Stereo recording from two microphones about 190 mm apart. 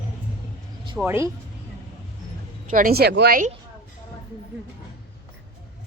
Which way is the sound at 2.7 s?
50° right (ahead or behind).